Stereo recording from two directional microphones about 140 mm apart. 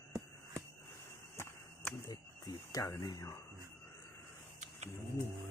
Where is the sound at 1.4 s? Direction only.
15° left (ahead or behind).